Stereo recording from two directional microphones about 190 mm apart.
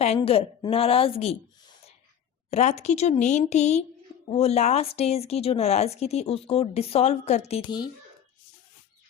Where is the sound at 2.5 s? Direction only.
35° left (ahead or behind).